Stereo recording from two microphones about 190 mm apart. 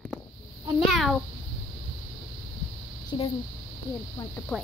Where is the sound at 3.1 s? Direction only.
25° left (ahead or behind).